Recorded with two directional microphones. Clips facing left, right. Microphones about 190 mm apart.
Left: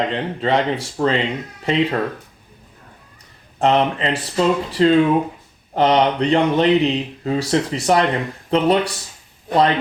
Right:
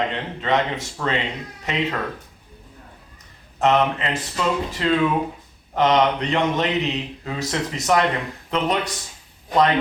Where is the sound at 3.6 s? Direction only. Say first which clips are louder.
Left 2 dB; 30° left (ahead or behind).